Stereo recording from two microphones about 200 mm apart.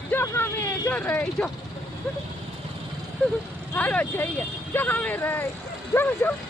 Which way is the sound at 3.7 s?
10° left (ahead or behind).